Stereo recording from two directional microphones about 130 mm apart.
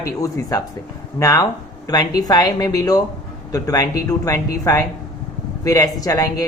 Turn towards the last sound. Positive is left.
turn(degrees=25)  # may be behind; listen again after turning